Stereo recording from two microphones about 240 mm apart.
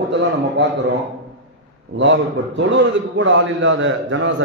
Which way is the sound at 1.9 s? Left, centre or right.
Right.